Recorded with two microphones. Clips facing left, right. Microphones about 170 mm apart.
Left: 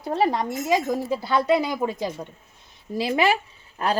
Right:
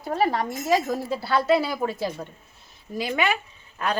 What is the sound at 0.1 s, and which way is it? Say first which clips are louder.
A woman's voice: left 1 dB; 20° left (ahead or behind).